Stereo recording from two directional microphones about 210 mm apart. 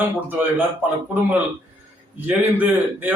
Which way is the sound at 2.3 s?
5° right (ahead or behind).